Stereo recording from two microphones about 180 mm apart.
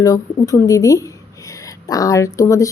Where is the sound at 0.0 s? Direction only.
20° left (ahead or behind).